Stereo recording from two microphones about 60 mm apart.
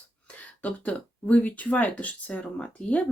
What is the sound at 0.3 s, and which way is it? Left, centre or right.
Speech, left.